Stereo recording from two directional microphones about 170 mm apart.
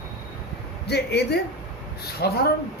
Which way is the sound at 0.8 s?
75° left (ahead or behind).